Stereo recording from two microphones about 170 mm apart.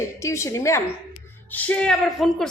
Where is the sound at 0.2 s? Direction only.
15° left (ahead or behind).